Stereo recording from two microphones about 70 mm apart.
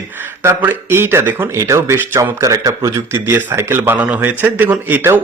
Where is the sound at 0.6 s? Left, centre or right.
Right.